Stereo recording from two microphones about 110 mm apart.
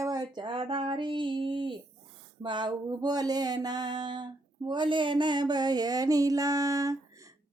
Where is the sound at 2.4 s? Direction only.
45° right (ahead or behind).